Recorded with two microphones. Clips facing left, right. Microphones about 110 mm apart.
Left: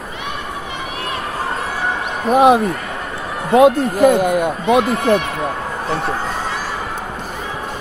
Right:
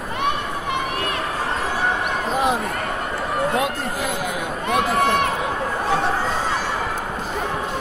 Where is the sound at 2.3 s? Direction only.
60° left (ahead or behind).